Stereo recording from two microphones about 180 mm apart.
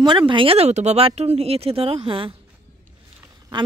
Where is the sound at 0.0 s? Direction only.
25° right (ahead or behind).